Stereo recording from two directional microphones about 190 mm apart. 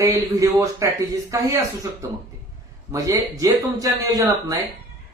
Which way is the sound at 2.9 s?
15° right (ahead or behind).